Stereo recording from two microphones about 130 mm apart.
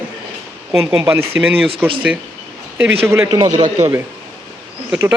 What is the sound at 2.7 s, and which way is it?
A man's voice, 15° right (ahead or behind).